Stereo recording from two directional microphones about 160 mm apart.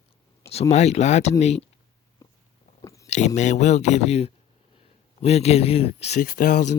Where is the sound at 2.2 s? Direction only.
20° left (ahead or behind).